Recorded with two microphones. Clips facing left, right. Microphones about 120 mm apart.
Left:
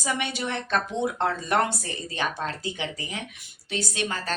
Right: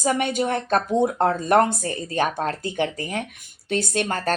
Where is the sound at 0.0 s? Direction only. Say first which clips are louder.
Right 7 dB; 45° right (ahead or behind).